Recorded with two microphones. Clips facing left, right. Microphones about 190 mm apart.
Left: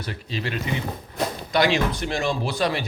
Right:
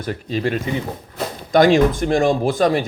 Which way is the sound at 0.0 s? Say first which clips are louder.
Right 8 dB; 45° right (ahead or behind).